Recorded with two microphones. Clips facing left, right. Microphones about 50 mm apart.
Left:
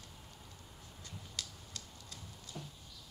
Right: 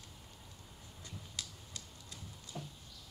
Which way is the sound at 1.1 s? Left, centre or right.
Right.